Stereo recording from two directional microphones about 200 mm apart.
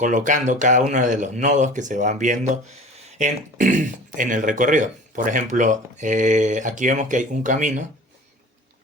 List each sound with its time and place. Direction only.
0.0 s speech: 40° right (ahead or behind)